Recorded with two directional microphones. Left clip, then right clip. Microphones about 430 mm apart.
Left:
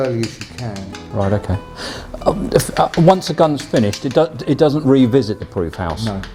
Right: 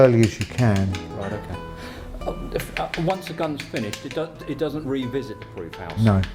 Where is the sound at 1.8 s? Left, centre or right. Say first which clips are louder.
Left 15 dB; left.